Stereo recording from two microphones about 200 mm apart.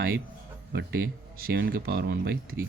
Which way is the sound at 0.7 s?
55° right (ahead or behind).